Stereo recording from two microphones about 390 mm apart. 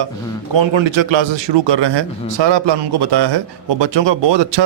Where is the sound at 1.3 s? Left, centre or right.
Right.